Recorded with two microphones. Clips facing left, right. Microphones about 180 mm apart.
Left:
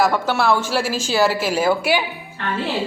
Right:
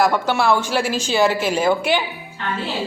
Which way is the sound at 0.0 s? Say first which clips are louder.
Even; 5° left (ahead or behind).